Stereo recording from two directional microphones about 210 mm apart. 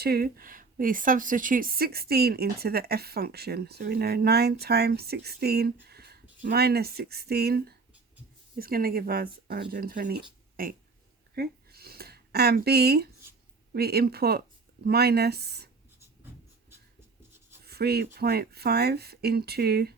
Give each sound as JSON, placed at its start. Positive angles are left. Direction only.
{"t": 0.0, "sound": "a woman's voice", "side_deg": -45}
{"t": 5.8, "sound": "a sound", "side_deg": -50}
{"t": 6.4, "sound": "a woman's voice", "side_deg": -50}
{"t": 11.3, "sound": "a sound", "side_deg": -45}
{"t": 13.7, "sound": "a woman's voice", "side_deg": -45}
{"t": 17.7, "sound": "a woman's voice", "side_deg": -50}